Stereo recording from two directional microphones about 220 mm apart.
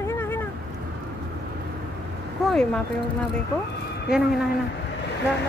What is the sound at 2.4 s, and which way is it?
Speech, 5° left (ahead or behind).